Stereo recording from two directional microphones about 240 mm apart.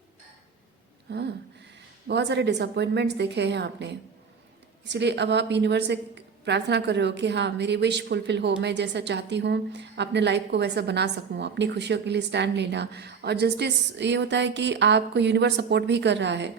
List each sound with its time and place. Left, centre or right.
1.1 s a woman's voice: right